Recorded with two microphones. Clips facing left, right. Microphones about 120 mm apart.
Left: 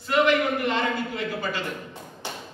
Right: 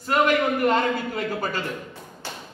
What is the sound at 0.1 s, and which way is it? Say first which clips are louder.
A man's voice: right 1 dB; 45° right (ahead or behind).